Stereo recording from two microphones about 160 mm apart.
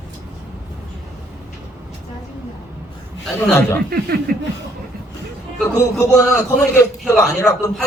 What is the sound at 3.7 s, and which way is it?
Speech, 70° right (ahead or behind).